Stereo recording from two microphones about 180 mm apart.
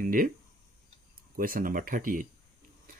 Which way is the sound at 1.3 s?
50° right (ahead or behind).